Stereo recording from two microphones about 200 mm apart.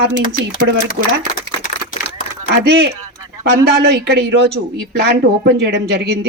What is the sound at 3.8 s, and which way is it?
A woman's voice, 55° right (ahead or behind).